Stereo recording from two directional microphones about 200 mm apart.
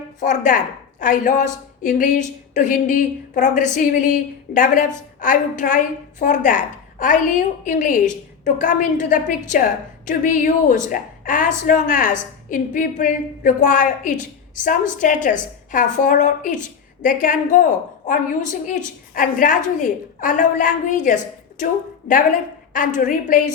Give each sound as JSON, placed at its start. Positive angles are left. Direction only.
{"t": 0.2, "sound": "a woman's voice", "side_deg": 40}